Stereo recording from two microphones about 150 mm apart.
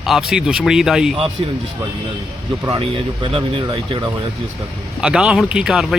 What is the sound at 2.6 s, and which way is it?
Speech, 30° right (ahead or behind).